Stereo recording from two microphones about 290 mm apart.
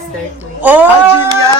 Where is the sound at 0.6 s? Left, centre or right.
Centre.